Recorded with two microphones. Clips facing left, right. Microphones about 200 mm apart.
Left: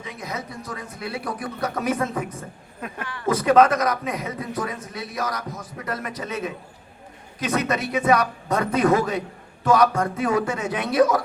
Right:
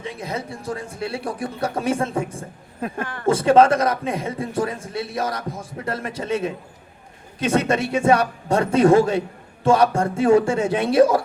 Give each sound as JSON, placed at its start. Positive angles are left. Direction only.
{"t": 0.0, "sound": "a man's voice", "side_deg": -30}
{"t": 3.0, "sound": "speech", "side_deg": -50}
{"t": 3.2, "sound": "a man's voice", "side_deg": -30}